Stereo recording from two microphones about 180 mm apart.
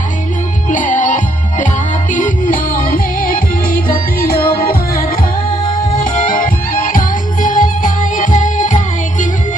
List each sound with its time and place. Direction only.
0.7 s music: 45° left (ahead or behind)
5.5 s music: 25° left (ahead or behind)
6.0 s music: 50° left (ahead or behind)